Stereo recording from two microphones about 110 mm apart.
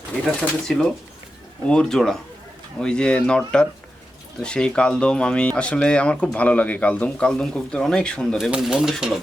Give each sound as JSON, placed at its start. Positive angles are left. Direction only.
{"t": 0.3, "sound": "speech", "side_deg": 5}
{"t": 8.4, "sound": "speech", "side_deg": -5}